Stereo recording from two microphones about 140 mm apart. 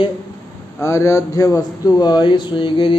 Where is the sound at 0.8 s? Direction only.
20° left (ahead or behind).